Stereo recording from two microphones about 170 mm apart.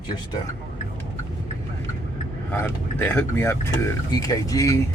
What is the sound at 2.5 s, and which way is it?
Speech, 10° left (ahead or behind).